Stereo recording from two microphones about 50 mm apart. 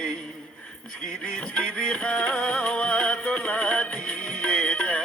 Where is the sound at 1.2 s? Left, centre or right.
Left.